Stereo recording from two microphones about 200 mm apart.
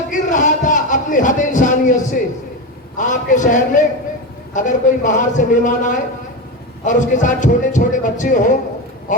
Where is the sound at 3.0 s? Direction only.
40° left (ahead or behind).